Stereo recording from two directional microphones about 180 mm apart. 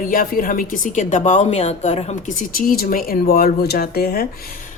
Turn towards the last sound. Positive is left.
turn(degrees=60)  # may be behind; listen again after turning